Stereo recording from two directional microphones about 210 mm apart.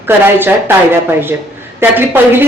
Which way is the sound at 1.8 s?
10° right (ahead or behind).